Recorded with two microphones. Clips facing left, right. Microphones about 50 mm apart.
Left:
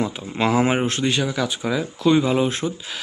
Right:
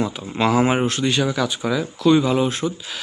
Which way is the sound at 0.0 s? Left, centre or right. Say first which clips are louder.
Right 1 dB; centre.